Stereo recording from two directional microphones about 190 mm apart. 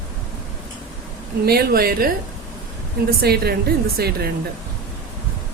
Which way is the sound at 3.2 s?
55° right (ahead or behind).